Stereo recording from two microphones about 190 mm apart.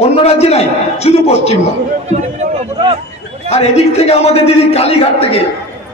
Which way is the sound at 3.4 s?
35° left (ahead or behind).